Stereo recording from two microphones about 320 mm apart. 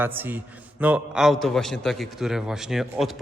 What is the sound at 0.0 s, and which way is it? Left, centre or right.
A man's voice, centre.